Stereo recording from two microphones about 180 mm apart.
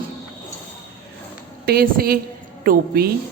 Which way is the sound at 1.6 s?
60° right (ahead or behind).